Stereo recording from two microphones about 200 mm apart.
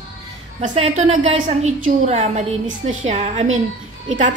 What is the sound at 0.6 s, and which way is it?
A woman's voice, 35° right (ahead or behind).